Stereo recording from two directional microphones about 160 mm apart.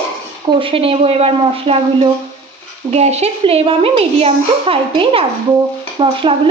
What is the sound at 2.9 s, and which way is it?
A woman's voice, 40° right (ahead or behind).